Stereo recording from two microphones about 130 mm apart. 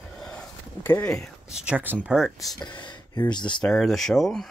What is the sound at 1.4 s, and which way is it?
Speech, 5° right (ahead or behind).